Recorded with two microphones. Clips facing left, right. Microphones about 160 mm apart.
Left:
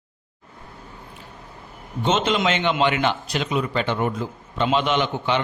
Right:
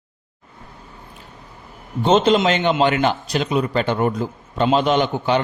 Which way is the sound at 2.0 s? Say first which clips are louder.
Right 6 dB; 35° right (ahead or behind).